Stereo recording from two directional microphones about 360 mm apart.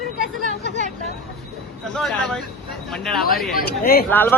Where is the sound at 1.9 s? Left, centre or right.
Centre.